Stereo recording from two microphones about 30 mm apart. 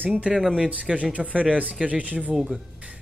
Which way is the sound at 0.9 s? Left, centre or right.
Centre.